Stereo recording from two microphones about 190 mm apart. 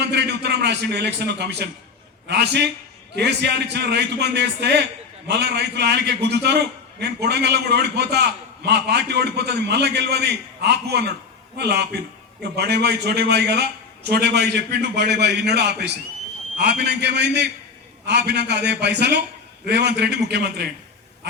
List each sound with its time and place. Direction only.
0.0 s a man's voice: 60° right (ahead or behind)